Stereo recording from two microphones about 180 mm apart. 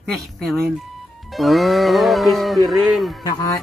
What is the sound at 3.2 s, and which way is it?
Speech, 20° left (ahead or behind).